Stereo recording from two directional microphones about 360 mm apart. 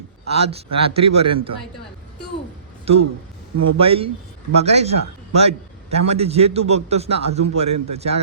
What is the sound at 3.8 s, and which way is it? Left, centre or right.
A man's voice, centre.